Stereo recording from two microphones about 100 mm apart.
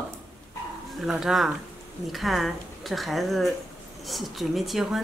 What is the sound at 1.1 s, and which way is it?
A woman's voice, 5° right (ahead or behind).